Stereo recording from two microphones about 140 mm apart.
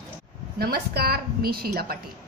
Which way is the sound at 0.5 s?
90° right.